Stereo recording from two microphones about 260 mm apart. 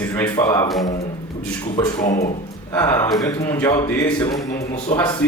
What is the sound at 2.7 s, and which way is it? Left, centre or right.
Speech, centre.